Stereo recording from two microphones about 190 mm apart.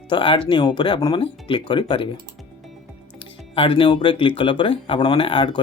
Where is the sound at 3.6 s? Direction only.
25° left (ahead or behind).